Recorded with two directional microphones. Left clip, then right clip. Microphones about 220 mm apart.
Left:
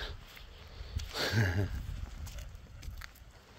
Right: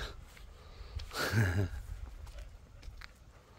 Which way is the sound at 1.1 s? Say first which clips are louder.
Left 1 dB; 15° right (ahead or behind).